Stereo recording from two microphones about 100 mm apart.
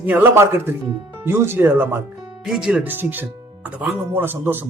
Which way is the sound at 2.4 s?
5° right (ahead or behind).